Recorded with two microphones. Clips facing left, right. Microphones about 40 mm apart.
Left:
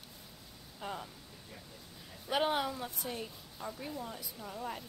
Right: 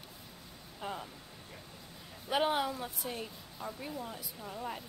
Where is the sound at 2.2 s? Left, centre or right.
Centre.